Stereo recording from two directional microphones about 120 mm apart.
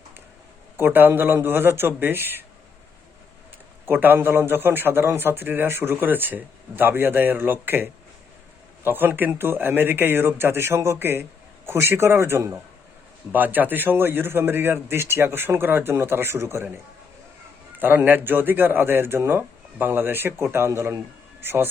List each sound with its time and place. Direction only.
0.8 s a man's voice: 15° right (ahead or behind)
3.8 s a man's voice: 15° right (ahead or behind)
17.7 s a man's voice: 15° right (ahead or behind)